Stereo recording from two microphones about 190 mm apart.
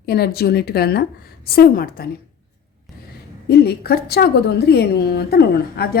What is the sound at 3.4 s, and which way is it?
A woman's voice, 55° left (ahead or behind).